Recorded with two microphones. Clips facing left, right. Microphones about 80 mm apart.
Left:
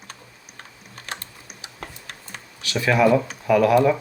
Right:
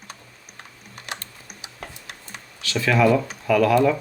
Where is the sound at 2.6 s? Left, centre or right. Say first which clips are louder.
Left 1 dB; centre.